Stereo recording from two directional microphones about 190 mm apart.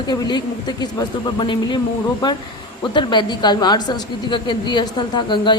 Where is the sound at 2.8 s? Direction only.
25° left (ahead or behind).